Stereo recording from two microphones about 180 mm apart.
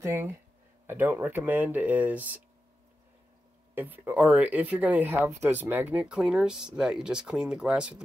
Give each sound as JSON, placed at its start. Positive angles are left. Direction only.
{"t": 0.0, "sound": "speech", "side_deg": -15}
{"t": 3.7, "sound": "speech", "side_deg": -10}